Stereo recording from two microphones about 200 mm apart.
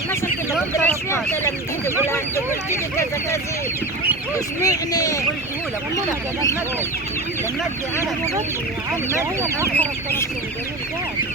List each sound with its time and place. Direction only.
0.8 s speech: 10° left (ahead or behind)
4.6 s speech: 15° left (ahead or behind)
9.0 s speech: 15° right (ahead or behind)
9.7 s speech: 10° left (ahead or behind)